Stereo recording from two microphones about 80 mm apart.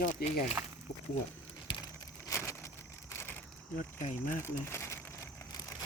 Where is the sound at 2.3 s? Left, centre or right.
Left.